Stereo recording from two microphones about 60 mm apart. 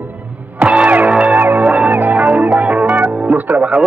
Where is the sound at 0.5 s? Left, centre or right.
Right.